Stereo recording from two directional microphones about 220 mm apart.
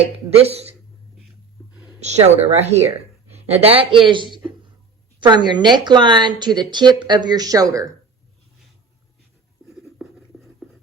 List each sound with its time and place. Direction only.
0.0 s speech: 30° right (ahead or behind)
2.0 s speech: 30° right (ahead or behind)
9.8 s writing: centre (ahead or behind)